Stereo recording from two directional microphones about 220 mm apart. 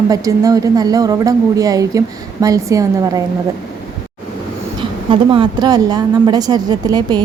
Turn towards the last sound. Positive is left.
turn(degrees=-15)  # may be behind; listen again after turning